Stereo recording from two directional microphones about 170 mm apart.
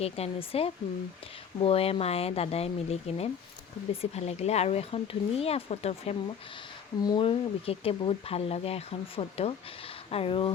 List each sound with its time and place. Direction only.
0.0 s speech: 35° left (ahead or behind)
7.0 s speech: 25° left (ahead or behind)